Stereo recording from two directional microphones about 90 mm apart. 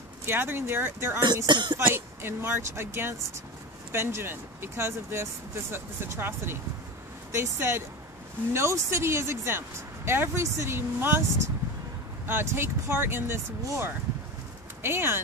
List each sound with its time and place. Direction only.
0.2 s speech: 25° right (ahead or behind)
1.2 s speech: 55° right (ahead or behind)
1.8 s speech: 25° right (ahead or behind)